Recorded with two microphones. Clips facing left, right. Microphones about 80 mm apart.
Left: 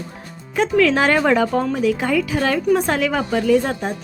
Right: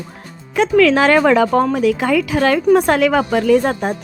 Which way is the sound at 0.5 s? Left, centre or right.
Right.